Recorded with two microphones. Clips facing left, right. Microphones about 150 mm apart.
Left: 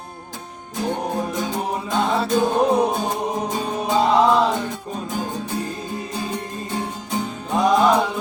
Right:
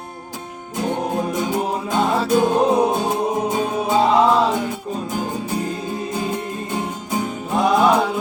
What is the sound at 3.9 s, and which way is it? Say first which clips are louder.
Music: right 1 dB; 5° right (ahead or behind).